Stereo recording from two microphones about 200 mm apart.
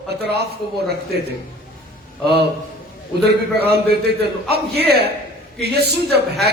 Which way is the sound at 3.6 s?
55° right (ahead or behind).